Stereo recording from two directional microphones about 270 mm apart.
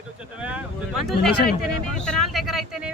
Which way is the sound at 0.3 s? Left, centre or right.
Centre.